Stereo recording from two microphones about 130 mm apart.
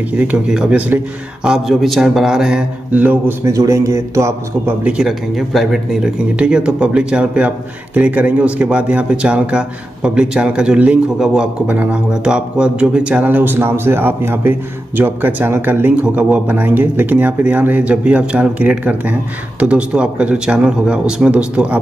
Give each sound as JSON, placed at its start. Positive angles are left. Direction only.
{"t": 0.2, "sound": "speech", "side_deg": -10}
{"t": 3.4, "sound": "a man's voice", "side_deg": -25}
{"t": 4.8, "sound": "speech", "side_deg": -5}